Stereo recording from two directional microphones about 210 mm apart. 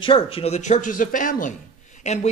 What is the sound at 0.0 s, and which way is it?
A man's voice, 25° left (ahead or behind).